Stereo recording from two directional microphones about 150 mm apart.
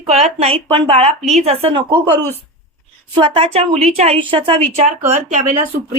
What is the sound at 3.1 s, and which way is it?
A woman's voice, 35° right (ahead or behind).